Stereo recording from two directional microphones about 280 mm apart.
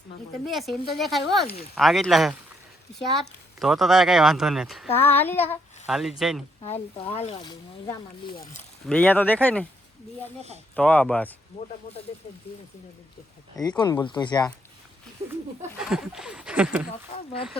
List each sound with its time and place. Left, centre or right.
0.4 s speech: centre
4.9 s speech: left
5.1 s speech: centre
6.6 s speech: left; by 9.6 s centre
10.8 s speech: centre
13.6 s speech: centre
15.2 s speech: right
15.8 s speech: centre